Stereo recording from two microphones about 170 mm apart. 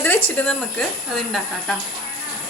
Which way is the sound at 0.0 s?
10° left (ahead or behind).